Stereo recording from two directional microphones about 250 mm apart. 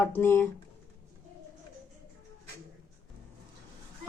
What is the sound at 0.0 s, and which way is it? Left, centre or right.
Speech, centre.